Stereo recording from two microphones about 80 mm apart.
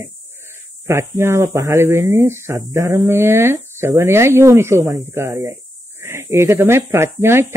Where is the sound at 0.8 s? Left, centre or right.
Right.